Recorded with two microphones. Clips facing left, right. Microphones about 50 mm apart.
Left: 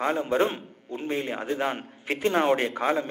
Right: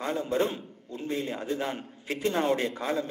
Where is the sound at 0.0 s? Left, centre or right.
Left.